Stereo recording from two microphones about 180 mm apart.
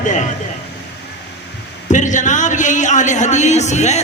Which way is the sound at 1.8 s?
45° left (ahead or behind).